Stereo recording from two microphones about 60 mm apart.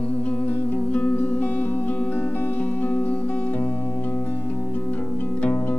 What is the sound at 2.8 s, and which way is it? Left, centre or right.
Music, left.